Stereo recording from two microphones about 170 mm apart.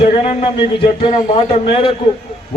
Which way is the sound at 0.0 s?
35° left (ahead or behind).